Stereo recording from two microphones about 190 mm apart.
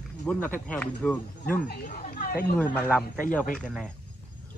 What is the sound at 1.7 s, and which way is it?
Speech, 45° left (ahead or behind).